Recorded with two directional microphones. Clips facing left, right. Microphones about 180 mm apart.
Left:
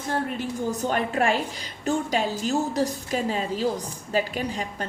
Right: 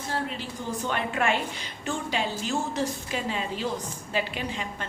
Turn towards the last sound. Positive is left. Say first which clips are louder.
# left 4 dB
turn(degrees=40)  # may be behind; listen again after turning